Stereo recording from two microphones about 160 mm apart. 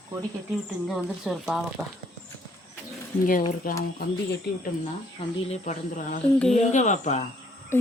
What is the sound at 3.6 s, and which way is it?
Speech, 65° left (ahead or behind).